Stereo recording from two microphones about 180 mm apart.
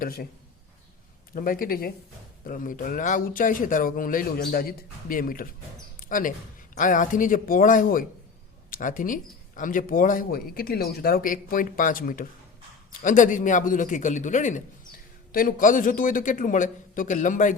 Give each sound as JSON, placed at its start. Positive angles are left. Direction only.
{"t": 0.0, "sound": "a man's voice", "side_deg": 55}
{"t": 1.3, "sound": "speech", "side_deg": 50}
{"t": 6.0, "sound": "a sound", "side_deg": 50}
{"t": 6.7, "sound": "speech", "side_deg": 45}